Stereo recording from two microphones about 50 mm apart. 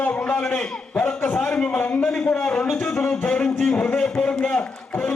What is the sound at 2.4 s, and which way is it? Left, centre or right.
Speech, left.